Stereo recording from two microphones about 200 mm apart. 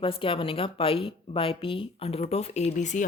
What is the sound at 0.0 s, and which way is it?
A woman's voice, 25° left (ahead or behind).